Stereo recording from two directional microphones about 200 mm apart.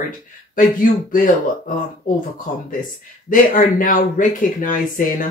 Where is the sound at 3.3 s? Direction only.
45° left (ahead or behind).